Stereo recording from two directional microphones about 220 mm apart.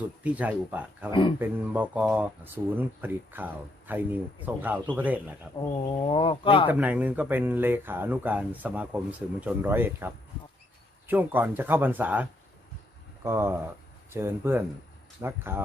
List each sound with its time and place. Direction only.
0.2 s speech: 5° right (ahead or behind)
6.1 s speech: 25° left (ahead or behind)
6.7 s speech: 5° right (ahead or behind)
11.1 s speech: 10° right (ahead or behind)